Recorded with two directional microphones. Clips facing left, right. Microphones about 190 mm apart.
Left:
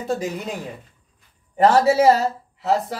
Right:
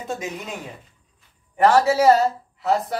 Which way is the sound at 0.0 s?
35° left (ahead or behind).